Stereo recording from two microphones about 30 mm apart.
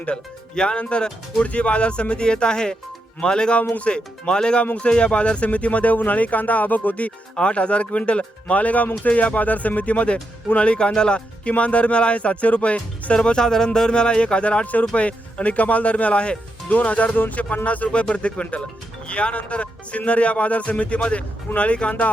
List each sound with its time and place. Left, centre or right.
0.5 s speech: left
0.8 s speech: left
3.6 s speech: left
3.8 s speech: left
5.5 s speech: left
7.3 s speech: left
10.9 s speech: left
11.4 s speech: left
13.1 s speech: left
16.6 s speech: left